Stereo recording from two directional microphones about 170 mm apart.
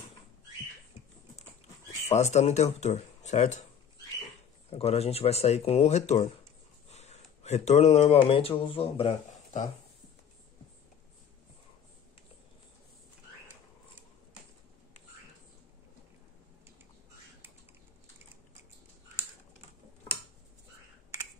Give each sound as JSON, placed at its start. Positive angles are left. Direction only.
{"t": 2.0, "sound": "speech", "side_deg": 40}
{"t": 4.6, "sound": "speech", "side_deg": 35}